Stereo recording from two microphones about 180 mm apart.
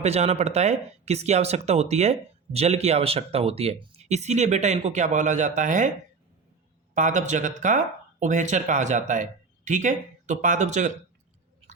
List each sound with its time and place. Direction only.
0.0 s speech: 35° right (ahead or behind)
6.9 s speech: 45° right (ahead or behind)